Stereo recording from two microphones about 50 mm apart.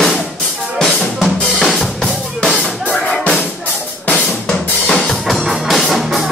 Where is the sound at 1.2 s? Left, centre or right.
Centre.